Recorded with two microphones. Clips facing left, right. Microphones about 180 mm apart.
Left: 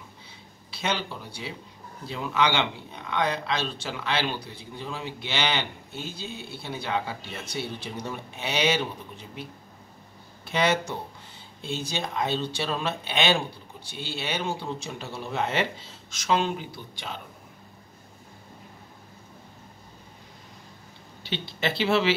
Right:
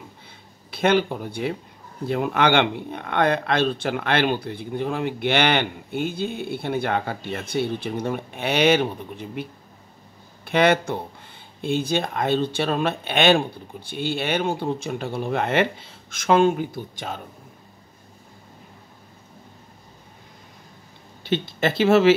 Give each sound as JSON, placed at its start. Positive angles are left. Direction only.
{"t": 0.7, "sound": "speech", "side_deg": -55}
{"t": 21.2, "sound": "speech", "side_deg": -50}